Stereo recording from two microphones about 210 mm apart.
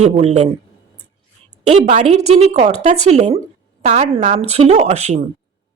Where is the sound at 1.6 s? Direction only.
30° right (ahead or behind).